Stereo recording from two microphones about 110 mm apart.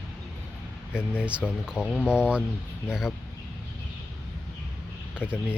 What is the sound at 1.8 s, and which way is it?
Speech, 10° left (ahead or behind).